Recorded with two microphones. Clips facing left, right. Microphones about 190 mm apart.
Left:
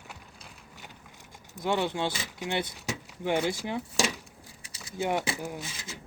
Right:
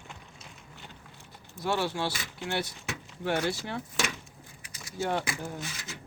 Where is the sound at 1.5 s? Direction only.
15° left (ahead or behind).